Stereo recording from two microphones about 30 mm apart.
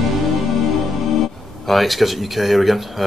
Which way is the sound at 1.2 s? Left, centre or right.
Centre.